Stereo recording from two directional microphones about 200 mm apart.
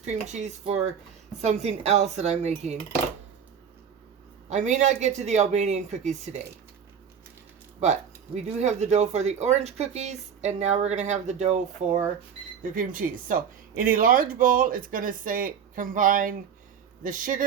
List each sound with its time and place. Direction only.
0.0 s speech: 35° right (ahead or behind)
4.4 s speech: 35° right (ahead or behind)
8.4 s speech: 35° right (ahead or behind)